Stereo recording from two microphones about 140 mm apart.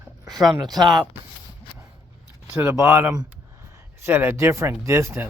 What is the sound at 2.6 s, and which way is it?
Speech, 20° right (ahead or behind).